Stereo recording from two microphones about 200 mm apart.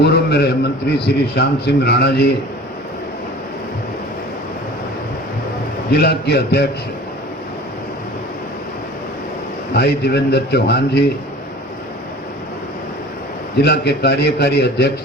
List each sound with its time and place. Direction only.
0.0 s a man's voice: 55° left (ahead or behind)
5.9 s a man's voice: 55° left (ahead or behind)
9.7 s a man's voice: 55° left (ahead or behind)
13.6 s a man's voice: 55° left (ahead or behind)